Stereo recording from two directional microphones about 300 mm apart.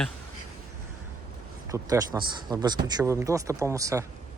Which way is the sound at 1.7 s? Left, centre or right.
Centre.